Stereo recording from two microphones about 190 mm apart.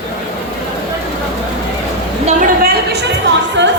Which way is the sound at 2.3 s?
45° right (ahead or behind).